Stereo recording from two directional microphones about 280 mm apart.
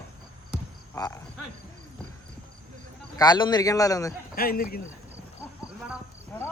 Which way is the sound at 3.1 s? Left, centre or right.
Centre.